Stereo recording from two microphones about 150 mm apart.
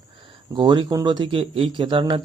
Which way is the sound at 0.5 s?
30° right (ahead or behind).